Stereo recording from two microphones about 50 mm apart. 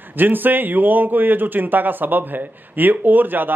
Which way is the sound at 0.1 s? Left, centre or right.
Right.